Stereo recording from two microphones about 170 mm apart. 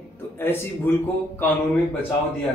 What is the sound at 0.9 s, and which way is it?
Speech, 15° left (ahead or behind).